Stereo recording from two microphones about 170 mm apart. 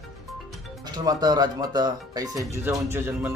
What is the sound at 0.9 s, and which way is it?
A man's voice, 25° right (ahead or behind).